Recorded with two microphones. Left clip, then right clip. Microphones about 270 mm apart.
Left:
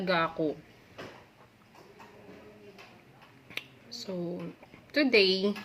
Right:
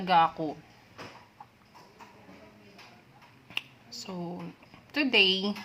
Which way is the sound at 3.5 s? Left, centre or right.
Right.